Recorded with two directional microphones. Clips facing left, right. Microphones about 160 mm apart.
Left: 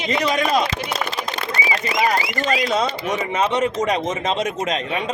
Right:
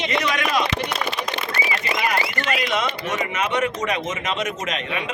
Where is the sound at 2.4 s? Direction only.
35° left (ahead or behind).